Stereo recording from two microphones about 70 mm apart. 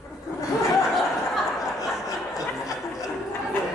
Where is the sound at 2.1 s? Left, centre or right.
Left.